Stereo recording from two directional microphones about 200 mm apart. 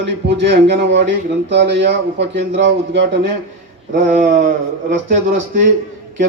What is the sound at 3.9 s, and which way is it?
Speech, 40° right (ahead or behind).